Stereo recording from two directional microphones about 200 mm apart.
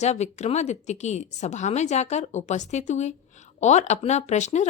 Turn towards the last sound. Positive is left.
turn(degrees=35)  # may be behind; listen again after turning